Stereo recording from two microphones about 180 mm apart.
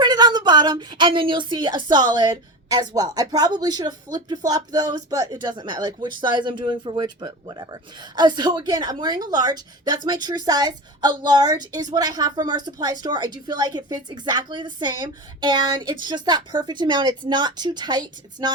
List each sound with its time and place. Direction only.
0.0 s speech: 20° right (ahead or behind)